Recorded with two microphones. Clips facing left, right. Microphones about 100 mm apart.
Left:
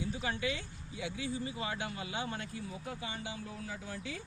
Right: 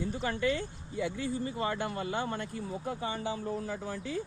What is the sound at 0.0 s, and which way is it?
Speech, 50° right (ahead or behind).